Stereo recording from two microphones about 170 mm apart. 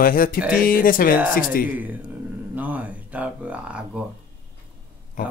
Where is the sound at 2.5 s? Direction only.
10° right (ahead or behind).